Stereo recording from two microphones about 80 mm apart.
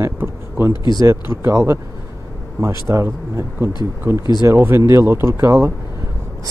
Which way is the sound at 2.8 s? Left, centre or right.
Right.